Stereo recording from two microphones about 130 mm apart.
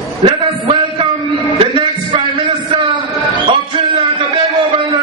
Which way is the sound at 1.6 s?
40° right (ahead or behind).